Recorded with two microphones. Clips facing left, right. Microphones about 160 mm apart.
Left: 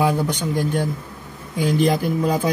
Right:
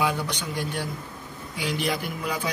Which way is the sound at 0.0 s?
45° left (ahead or behind).